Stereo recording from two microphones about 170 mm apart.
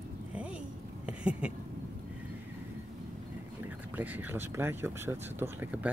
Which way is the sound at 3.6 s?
10° right (ahead or behind).